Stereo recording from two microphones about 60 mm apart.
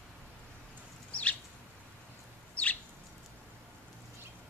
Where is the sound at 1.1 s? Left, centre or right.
Left.